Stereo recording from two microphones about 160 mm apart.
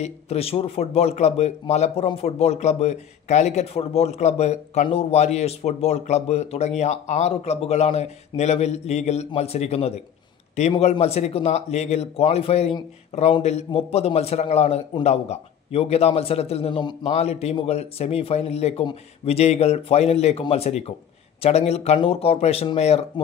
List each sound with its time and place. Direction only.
0.0 s a man's voice: 40° left (ahead or behind)